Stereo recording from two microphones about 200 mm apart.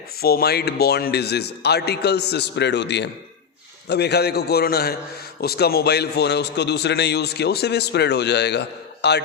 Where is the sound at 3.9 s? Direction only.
55° left (ahead or behind).